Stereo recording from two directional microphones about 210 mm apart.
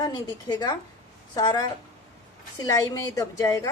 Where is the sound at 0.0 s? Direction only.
20° left (ahead or behind).